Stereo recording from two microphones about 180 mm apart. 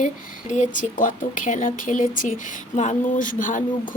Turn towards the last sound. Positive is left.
turn(degrees=45)  # may be behind; listen again after turning